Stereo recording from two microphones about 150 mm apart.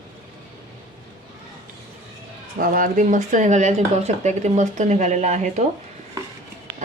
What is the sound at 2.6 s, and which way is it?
Speech, 65° right (ahead or behind).